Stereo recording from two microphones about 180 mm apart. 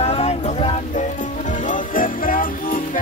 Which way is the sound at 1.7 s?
50° left (ahead or behind).